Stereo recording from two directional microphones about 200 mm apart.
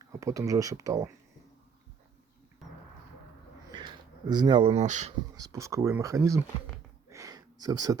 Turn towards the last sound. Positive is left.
turn(degrees=-20)  # may be behind; listen again after turning